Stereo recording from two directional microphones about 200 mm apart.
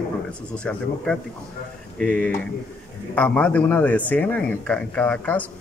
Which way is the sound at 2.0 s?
5° left (ahead or behind).